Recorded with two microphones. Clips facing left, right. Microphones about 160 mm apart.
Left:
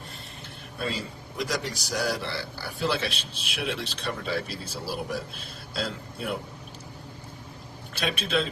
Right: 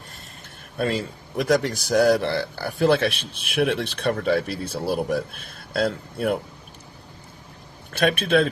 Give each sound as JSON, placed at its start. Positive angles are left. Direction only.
{"t": 0.8, "sound": "a man's voice", "side_deg": -55}
{"t": 7.9, "sound": "a man's voice", "side_deg": -55}